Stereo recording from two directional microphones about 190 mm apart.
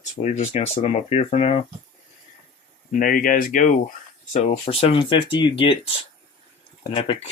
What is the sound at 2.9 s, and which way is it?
Speech, 45° left (ahead or behind).